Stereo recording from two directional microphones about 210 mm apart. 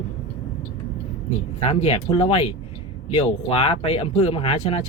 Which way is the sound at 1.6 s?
30° left (ahead or behind).